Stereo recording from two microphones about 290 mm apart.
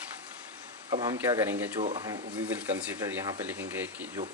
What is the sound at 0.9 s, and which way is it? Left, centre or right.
Speech, centre.